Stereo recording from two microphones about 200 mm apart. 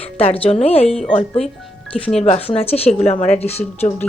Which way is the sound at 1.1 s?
30° left (ahead or behind).